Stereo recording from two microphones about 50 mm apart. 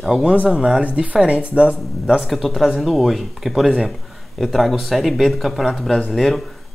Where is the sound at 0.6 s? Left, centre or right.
Centre.